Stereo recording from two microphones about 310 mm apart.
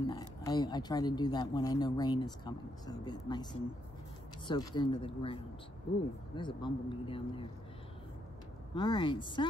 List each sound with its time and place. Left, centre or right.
0.0 s speech: centre
4.5 s speech: centre
8.7 s speech: centre